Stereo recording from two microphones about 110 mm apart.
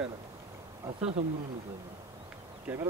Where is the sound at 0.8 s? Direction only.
70° right (ahead or behind).